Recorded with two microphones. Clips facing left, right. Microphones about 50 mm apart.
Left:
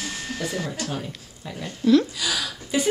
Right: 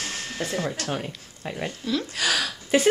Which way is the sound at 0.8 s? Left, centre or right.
Right.